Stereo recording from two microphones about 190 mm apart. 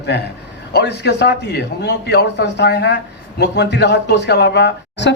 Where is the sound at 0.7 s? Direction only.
60° left (ahead or behind).